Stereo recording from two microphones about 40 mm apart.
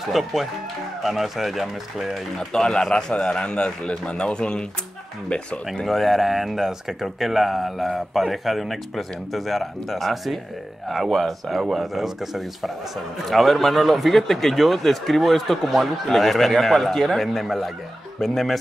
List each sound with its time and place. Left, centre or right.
0.1 s speech: centre
2.3 s speech: centre
5.9 s speech: centre